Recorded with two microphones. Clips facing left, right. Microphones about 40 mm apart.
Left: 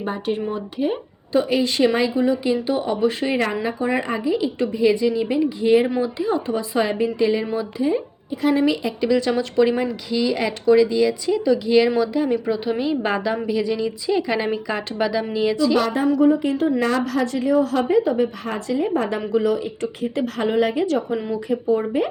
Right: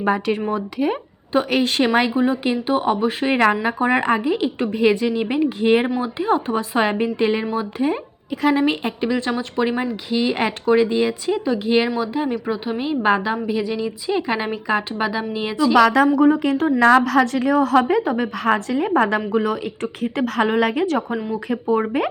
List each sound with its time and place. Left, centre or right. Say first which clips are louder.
0.5 s speech: right 2 dB; right
1.5 s a woman's voice: even; right
2.1 s a woman's voice: even; right
3.3 s a woman's voice: right 5 dB; right
7.8 s a woman's voice: even; right
8.5 s a woman's voice: even; right
9.0 s speech: left 2 dB; right
15.7 s a woman's voice: right 6 dB; right
16.2 s a woman's voice: right 1 dB; right
18.3 s a woman's voice: right 4 dB; right
19.3 s a woman's voice: left 1 dB; right